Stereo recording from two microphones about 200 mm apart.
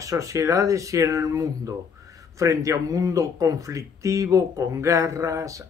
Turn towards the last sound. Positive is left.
turn(degrees=-15)  # may be behind; listen again after turning